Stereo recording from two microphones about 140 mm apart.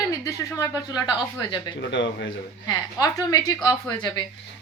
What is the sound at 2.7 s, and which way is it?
A woman's voice, 25° left (ahead or behind).